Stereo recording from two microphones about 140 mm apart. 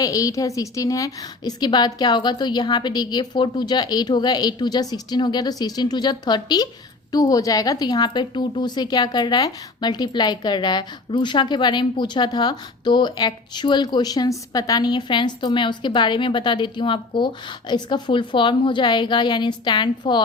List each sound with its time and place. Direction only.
0.0 s a woman's voice: 25° left (ahead or behind)